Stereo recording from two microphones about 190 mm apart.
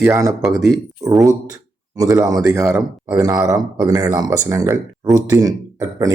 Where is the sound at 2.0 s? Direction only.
15° right (ahead or behind).